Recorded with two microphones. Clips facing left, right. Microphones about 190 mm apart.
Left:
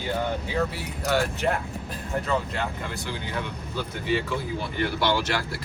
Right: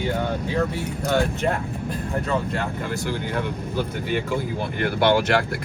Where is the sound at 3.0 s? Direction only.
50° right (ahead or behind).